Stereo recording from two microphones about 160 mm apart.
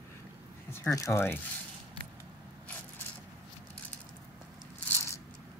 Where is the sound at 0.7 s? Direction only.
20° left (ahead or behind).